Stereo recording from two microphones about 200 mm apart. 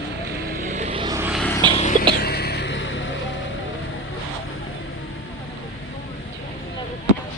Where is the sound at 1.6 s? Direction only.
20° right (ahead or behind).